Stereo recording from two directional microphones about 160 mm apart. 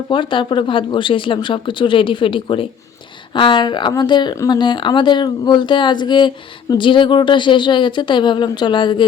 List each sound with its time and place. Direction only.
0.1 s speech: 30° left (ahead or behind)